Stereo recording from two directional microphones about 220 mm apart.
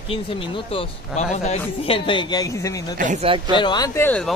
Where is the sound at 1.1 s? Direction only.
25° left (ahead or behind).